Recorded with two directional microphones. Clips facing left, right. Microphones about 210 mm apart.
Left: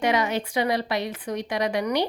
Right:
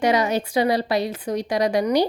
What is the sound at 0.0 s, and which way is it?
A woman's voice, 35° right (ahead or behind).